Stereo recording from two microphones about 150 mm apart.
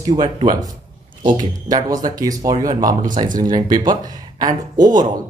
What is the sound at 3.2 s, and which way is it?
Speech, 35° right (ahead or behind).